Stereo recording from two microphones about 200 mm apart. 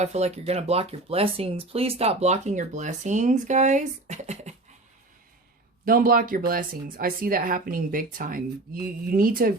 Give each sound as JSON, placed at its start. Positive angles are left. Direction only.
{"t": 0.0, "sound": "speech", "side_deg": -35}
{"t": 5.8, "sound": "speech", "side_deg": -45}